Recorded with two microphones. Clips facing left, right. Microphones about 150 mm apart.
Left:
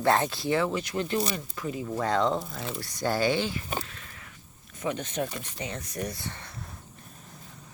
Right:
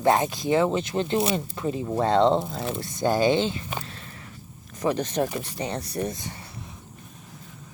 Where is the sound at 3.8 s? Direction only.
35° right (ahead or behind).